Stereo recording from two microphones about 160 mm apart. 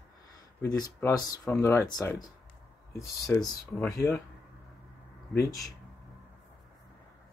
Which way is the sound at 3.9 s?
15° left (ahead or behind).